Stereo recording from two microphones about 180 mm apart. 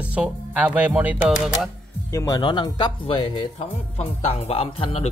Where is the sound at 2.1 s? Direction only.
20° left (ahead or behind).